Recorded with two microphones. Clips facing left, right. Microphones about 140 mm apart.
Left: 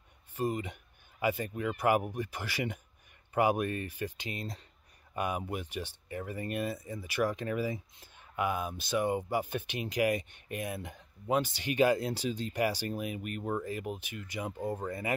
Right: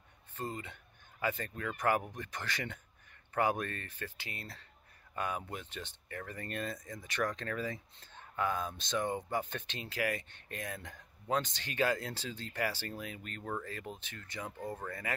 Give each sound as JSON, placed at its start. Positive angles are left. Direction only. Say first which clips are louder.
{"t": 0.3, "sound": "speech", "louder": "left 8 dB", "side_deg": 15}